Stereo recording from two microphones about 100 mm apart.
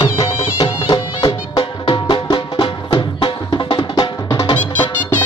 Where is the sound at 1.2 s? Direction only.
35° left (ahead or behind).